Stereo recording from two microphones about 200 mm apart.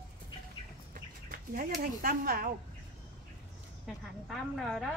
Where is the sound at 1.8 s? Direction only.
45° right (ahead or behind).